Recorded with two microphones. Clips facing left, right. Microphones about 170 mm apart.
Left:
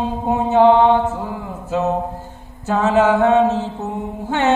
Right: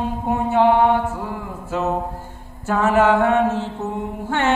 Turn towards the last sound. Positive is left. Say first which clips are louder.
# left 3 dB
turn(degrees=20)  # may be behind; listen again after turning